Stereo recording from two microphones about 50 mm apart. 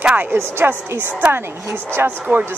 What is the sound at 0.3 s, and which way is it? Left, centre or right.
A woman's voice, right.